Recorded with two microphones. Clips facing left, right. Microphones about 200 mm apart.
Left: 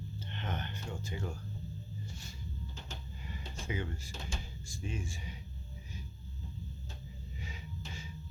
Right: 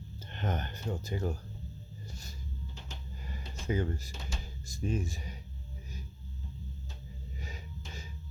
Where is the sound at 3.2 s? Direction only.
40° right (ahead or behind).